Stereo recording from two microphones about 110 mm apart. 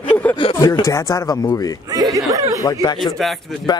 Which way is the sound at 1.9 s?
35° right (ahead or behind).